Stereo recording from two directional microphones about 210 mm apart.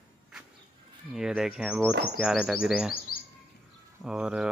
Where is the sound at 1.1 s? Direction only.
Centre (ahead or behind).